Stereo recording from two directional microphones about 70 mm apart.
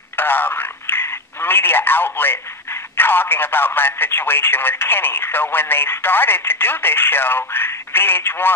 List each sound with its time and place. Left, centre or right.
0.1 s speech: left